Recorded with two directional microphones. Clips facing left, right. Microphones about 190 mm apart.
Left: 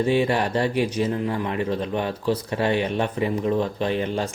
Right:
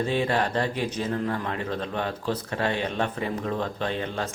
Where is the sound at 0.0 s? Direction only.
10° left (ahead or behind).